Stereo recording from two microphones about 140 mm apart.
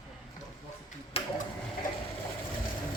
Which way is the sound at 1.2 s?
45° left (ahead or behind).